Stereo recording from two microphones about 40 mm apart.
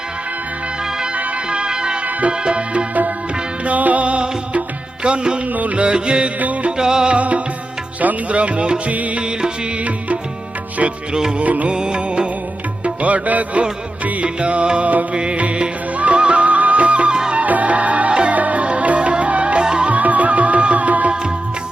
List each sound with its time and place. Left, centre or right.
1.5 s music: right
3.7 s music: right
5.5 s music: right
5.8 s music: right
6.4 s music: right
6.7 s music: centre
7.2 s music: right
11.1 s music: right
11.4 s music: right
11.7 s music: right
18.1 s music: right
18.3 s music: right
19.6 s music: right
19.9 s music: right